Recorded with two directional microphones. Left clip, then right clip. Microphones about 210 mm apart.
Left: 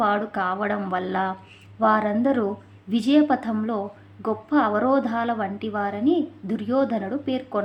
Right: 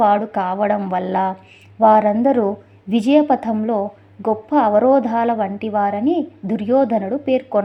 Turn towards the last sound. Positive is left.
turn(degrees=-25)  # may be behind; listen again after turning